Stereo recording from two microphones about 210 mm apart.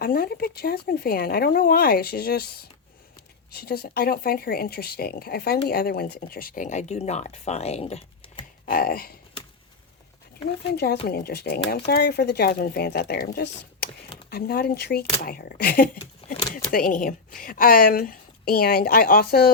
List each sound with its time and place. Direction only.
0.0 s speech: 45° left (ahead or behind); by 8.4 s 30° left (ahead or behind)
8.6 s speech: 45° left (ahead or behind)
11.0 s speech: 50° left (ahead or behind)